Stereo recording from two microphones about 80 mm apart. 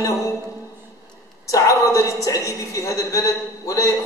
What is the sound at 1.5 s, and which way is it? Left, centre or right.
A woman's voice, left.